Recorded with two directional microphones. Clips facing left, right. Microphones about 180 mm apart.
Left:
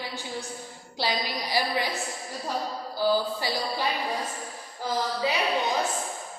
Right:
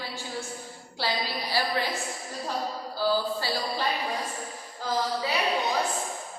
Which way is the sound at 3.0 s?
15° left (ahead or behind).